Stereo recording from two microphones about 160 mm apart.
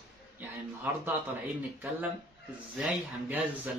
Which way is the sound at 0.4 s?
10° right (ahead or behind).